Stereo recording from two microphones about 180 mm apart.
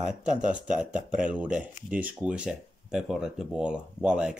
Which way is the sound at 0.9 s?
45° right (ahead or behind).